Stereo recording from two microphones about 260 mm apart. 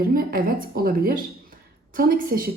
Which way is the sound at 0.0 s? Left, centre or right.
Right.